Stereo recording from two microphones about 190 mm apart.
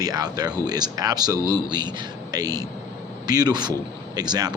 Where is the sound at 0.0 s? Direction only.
20° right (ahead or behind).